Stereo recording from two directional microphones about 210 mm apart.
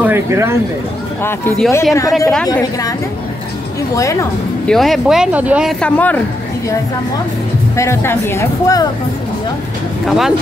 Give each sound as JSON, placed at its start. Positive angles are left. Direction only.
{"t": 0.0, "sound": "speech", "side_deg": -10}
{"t": 1.2, "sound": "speech", "side_deg": 10}
{"t": 2.4, "sound": "speech", "side_deg": 15}
{"t": 3.9, "sound": "speech", "side_deg": 15}
{"t": 4.6, "sound": "speech", "side_deg": 0}
{"t": 7.7, "sound": "speech", "side_deg": 15}
{"t": 10.0, "sound": "speech", "side_deg": 0}